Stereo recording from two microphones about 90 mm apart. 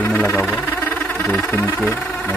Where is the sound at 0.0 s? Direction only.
25° left (ahead or behind).